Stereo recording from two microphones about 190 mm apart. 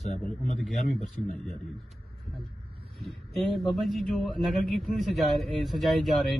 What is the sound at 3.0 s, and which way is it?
A man's voice, centre (ahead or behind).